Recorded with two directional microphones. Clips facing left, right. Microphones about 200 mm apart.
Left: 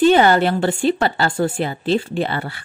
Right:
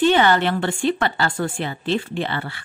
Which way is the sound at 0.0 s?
40° left (ahead or behind).